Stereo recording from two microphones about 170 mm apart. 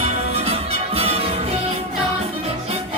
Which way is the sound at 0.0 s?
35° right (ahead or behind).